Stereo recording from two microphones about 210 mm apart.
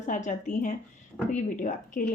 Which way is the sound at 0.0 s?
35° left (ahead or behind).